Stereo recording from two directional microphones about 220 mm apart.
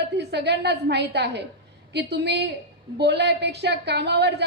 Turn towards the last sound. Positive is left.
turn(degrees=-50)  # may be behind; listen again after turning